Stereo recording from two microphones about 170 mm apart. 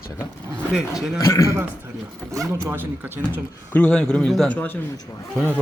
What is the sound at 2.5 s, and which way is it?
Speech, 15° right (ahead or behind).